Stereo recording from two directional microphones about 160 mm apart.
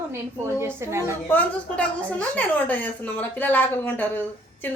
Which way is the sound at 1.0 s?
10° left (ahead or behind).